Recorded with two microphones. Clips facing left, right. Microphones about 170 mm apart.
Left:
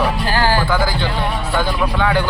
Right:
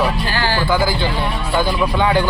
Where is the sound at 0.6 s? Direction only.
10° right (ahead or behind).